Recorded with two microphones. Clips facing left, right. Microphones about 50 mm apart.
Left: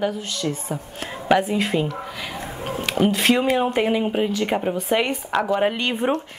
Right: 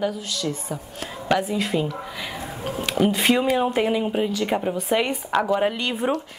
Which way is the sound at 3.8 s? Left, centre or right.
Centre.